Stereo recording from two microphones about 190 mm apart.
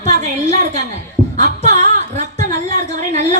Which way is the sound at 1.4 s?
40° right (ahead or behind).